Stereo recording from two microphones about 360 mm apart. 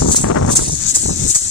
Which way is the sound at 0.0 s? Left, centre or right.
Left.